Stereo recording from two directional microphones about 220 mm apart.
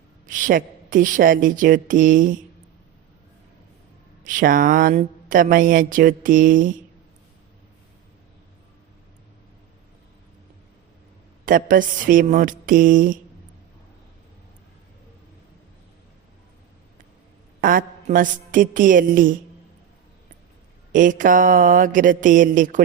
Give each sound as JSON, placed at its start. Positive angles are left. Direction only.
{"t": 0.3, "sound": "speech", "side_deg": -35}
{"t": 4.2, "sound": "speech", "side_deg": -40}
{"t": 11.4, "sound": "speech", "side_deg": -40}
{"t": 17.6, "sound": "speech", "side_deg": -40}
{"t": 20.9, "sound": "speech", "side_deg": -35}